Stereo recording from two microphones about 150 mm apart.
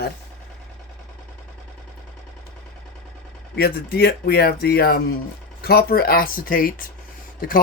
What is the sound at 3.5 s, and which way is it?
Speech, 90° left.